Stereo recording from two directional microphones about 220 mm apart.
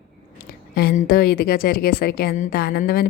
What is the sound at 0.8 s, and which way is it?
A woman's voice, 45° left (ahead or behind).